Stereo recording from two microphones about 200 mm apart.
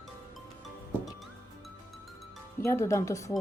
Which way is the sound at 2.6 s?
15° left (ahead or behind).